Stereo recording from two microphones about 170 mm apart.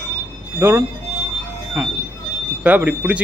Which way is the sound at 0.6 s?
10° right (ahead or behind).